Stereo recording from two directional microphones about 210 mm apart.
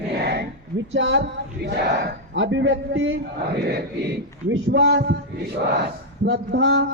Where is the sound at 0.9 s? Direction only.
60° right (ahead or behind).